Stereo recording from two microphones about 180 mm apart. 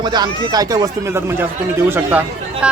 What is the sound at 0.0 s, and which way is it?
Speech, 25° right (ahead or behind).